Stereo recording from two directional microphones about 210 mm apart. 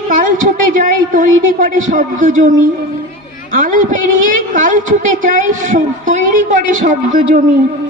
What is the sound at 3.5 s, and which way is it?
A woman's voice, 40° right (ahead or behind).